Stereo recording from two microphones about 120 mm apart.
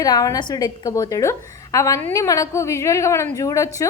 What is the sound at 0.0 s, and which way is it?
A woman's voice, 30° left (ahead or behind).